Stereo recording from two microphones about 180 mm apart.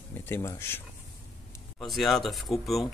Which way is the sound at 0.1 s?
10° left (ahead or behind).